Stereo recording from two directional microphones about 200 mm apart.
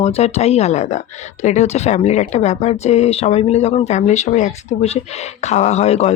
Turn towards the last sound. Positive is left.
turn(degrees=30)  # may be behind; listen again after turning